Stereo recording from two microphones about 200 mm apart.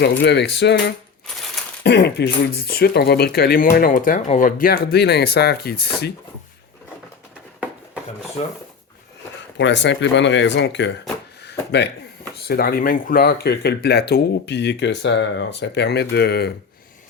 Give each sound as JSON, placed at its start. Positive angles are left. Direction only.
{"t": 0.0, "sound": "speech", "side_deg": 55}
{"t": 9.6, "sound": "speech", "side_deg": 60}